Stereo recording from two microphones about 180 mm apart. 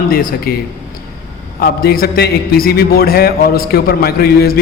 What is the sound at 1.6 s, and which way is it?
A man's voice, 60° left (ahead or behind).